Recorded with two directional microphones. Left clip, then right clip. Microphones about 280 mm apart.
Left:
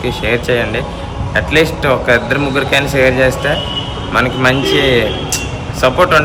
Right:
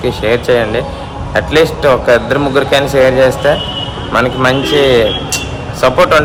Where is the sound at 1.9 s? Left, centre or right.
Right.